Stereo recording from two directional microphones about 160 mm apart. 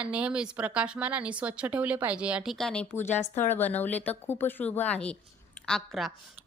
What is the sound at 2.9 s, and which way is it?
Speech, 15° left (ahead or behind).